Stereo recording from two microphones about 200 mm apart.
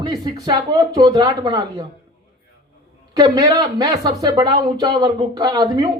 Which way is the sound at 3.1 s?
20° right (ahead or behind).